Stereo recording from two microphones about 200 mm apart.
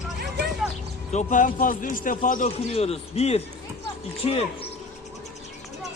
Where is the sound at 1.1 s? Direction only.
40° left (ahead or behind).